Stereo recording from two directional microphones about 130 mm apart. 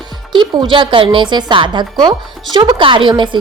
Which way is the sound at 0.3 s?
40° right (ahead or behind).